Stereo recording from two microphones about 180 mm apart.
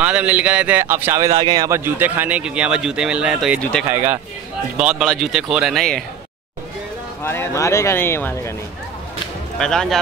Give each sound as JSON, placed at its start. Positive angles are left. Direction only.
{"t": 0.0, "sound": "speech", "side_deg": -10}
{"t": 2.0, "sound": "speech", "side_deg": -10}
{"t": 7.2, "sound": "speech", "side_deg": 15}
{"t": 9.6, "sound": "speech", "side_deg": 5}